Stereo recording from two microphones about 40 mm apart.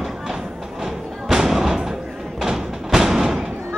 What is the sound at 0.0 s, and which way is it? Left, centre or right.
Music, centre.